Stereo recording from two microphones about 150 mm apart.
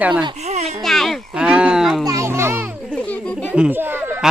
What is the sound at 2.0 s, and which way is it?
Children playing, 20° right (ahead or behind).